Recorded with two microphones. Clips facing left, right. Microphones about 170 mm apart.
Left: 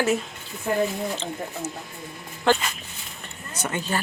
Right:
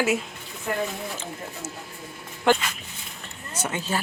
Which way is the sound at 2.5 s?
15° right (ahead or behind).